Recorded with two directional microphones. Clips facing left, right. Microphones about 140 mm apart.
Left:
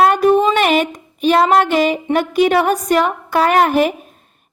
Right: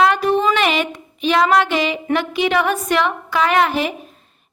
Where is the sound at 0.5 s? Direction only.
45° left (ahead or behind).